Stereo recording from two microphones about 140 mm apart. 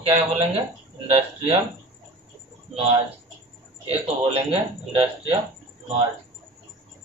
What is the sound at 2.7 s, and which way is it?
Speech, 45° right (ahead or behind).